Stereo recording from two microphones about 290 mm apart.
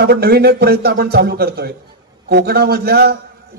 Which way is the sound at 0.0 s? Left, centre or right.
Right.